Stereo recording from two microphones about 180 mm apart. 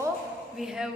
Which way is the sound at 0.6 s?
5° right (ahead or behind).